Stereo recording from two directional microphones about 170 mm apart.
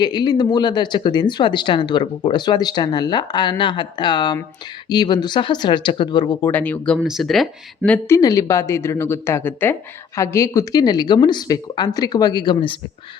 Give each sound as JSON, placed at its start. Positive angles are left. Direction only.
{"t": 0.0, "sound": "speech", "side_deg": 25}
{"t": 6.5, "sound": "speech", "side_deg": 10}
{"t": 7.9, "sound": "speech", "side_deg": 10}